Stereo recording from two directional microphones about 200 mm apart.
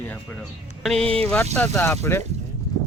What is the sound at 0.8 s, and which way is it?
Speech, centre (ahead or behind).